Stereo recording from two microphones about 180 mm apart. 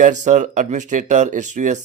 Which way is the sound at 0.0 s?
40° right (ahead or behind).